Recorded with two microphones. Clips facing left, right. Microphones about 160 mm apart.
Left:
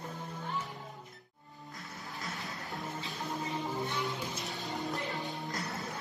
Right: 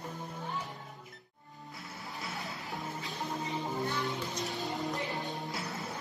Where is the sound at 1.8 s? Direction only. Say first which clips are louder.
Right 1 dB; centre (ahead or behind).